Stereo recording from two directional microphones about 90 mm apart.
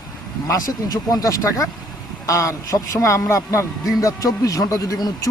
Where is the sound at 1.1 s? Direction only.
40° left (ahead or behind).